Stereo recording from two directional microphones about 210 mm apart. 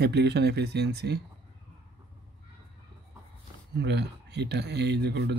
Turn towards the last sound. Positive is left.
turn(degrees=-50)  # may be behind; listen again after turning